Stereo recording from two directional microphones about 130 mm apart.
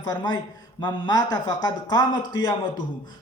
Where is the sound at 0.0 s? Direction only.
30° left (ahead or behind).